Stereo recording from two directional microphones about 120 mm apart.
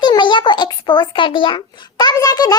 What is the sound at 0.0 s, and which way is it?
A child's voice, 40° left (ahead or behind).